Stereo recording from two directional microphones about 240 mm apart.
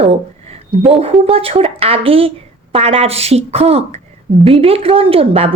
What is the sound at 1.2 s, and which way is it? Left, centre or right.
Speech, right.